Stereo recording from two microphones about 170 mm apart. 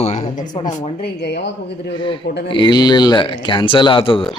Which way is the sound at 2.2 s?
85° left.